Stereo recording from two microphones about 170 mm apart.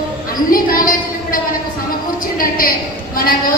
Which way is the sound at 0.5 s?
55° left (ahead or behind).